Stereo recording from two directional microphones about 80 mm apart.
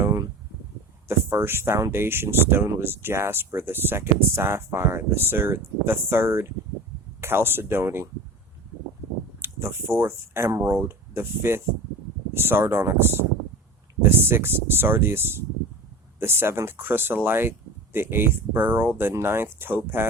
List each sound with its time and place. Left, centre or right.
0.0 s a sound: right
1.0 s speech: right
9.4 s speech: right